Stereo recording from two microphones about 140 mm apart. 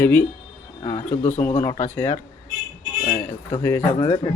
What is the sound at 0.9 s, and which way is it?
Speech, 55° left (ahead or behind).